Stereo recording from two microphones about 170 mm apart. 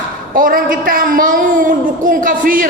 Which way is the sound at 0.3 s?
55° right (ahead or behind).